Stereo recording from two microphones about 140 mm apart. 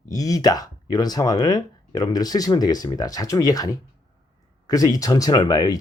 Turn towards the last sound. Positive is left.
turn(degrees=30)  # may be behind; listen again after turning